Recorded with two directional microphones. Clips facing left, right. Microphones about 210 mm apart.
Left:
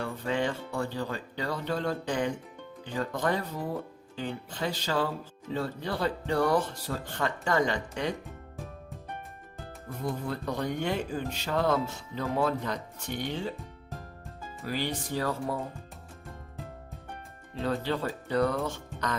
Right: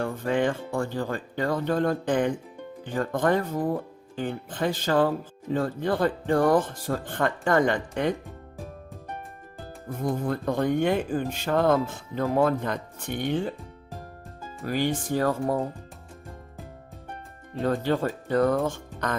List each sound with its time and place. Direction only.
0.0 s speech: 50° right (ahead or behind)
10.0 s speech: 50° right (ahead or behind)
14.6 s speech: 50° right (ahead or behind)
17.6 s speech: 50° right (ahead or behind)